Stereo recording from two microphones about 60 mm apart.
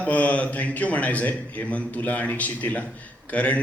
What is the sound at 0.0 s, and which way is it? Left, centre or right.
A man's voice, left.